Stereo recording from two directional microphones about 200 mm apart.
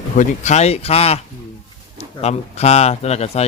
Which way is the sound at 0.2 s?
35° left (ahead or behind).